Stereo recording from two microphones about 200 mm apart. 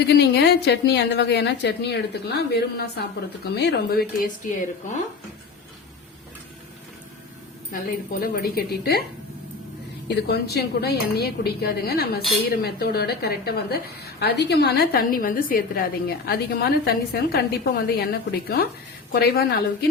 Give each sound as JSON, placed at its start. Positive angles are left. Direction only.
{"t": 0.1, "sound": "a woman's voice", "side_deg": 55}
{"t": 7.7, "sound": "a woman's voice", "side_deg": 45}
{"t": 10.1, "sound": "a woman's voice", "side_deg": 55}